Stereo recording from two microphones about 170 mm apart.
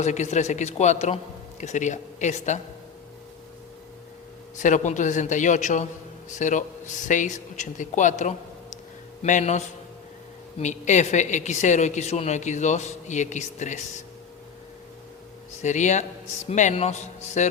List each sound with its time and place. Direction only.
0.0 s speech: 45° left (ahead or behind)
4.5 s speech: 45° left (ahead or behind)
15.6 s speech: 45° left (ahead or behind)